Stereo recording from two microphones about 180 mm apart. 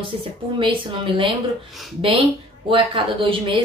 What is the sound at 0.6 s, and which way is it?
A woman's voice, 30° right (ahead or behind).